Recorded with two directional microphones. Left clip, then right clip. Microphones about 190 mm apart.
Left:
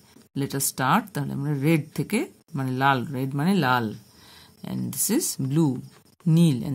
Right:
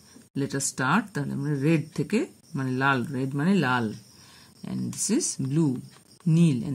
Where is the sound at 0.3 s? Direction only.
25° left (ahead or behind).